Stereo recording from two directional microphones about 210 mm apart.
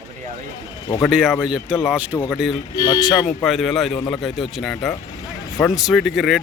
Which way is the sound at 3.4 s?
Centre (ahead or behind).